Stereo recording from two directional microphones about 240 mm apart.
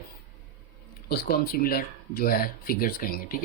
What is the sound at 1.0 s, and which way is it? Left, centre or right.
Speech, left.